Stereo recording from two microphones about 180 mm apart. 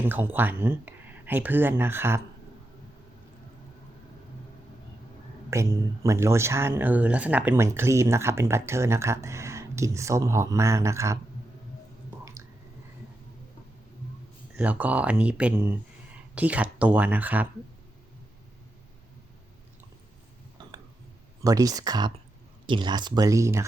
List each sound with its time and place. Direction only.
0.0 s speech: 10° right (ahead or behind)
5.5 s speech: 15° right (ahead or behind)
14.5 s speech: 10° right (ahead or behind)
21.4 s speech: 20° right (ahead or behind)